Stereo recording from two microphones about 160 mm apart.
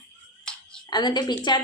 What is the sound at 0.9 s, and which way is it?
Speech, 25° left (ahead or behind).